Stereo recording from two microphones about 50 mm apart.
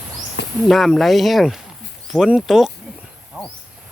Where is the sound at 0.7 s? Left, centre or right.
Centre.